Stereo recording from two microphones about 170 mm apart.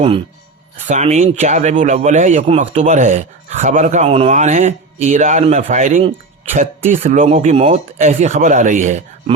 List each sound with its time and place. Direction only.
0.9 s a man's voice: 45° right (ahead or behind)